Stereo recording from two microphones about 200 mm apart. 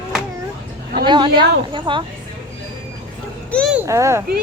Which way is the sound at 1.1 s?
25° right (ahead or behind).